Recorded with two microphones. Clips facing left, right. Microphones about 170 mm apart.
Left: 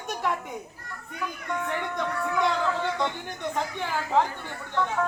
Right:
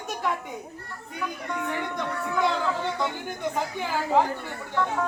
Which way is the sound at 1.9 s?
Centre (ahead or behind).